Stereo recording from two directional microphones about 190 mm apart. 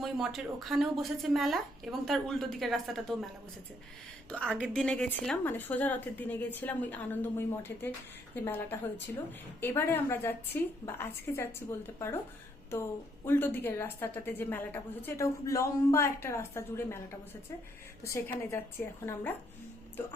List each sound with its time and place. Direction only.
0.0 s speech: centre (ahead or behind)
4.3 s a woman's voice: 5° left (ahead or behind)
12.7 s a woman's voice: 15° left (ahead or behind)
18.0 s a woman's voice: 15° left (ahead or behind)